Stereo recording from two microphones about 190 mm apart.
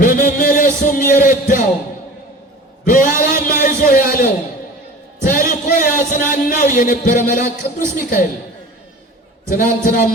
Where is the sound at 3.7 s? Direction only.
45° left (ahead or behind).